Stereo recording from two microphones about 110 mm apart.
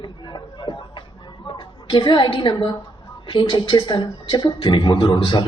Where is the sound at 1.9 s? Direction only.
45° left (ahead or behind).